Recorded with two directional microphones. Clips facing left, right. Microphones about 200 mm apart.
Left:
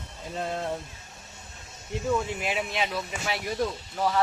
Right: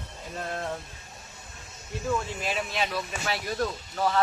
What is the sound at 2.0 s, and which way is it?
Speech, 15° left (ahead or behind).